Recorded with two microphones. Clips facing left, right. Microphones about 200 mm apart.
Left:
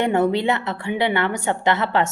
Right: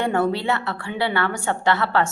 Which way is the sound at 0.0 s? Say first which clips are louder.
Left 3 dB; 20° left (ahead or behind).